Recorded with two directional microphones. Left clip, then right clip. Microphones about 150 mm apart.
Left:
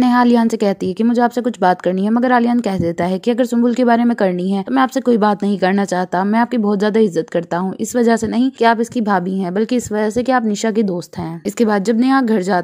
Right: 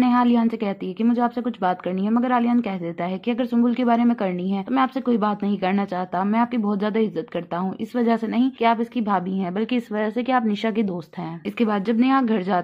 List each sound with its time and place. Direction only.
0.0 s a woman's voice: 65° left (ahead or behind); by 12.6 s 45° left (ahead or behind)